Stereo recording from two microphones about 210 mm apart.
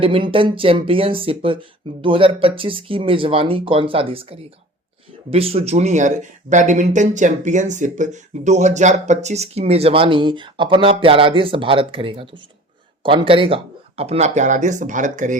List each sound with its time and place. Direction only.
0.0 s speech: 25° right (ahead or behind)